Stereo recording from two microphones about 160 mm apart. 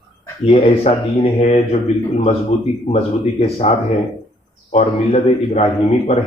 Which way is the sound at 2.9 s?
40° left (ahead or behind).